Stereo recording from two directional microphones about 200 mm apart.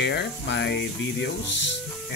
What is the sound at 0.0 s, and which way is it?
Speech, 60° left (ahead or behind).